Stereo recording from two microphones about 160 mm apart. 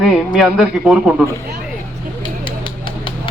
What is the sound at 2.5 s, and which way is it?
Vehicle, 30° left (ahead or behind).